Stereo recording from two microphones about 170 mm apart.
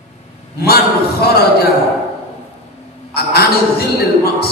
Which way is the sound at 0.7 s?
65° left (ahead or behind).